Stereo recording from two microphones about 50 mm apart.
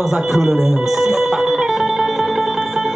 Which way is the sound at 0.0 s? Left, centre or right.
Centre.